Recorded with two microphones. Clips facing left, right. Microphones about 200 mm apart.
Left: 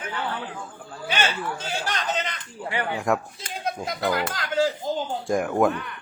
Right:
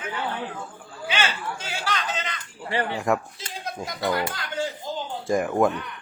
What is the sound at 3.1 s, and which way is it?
Speech, centre (ahead or behind).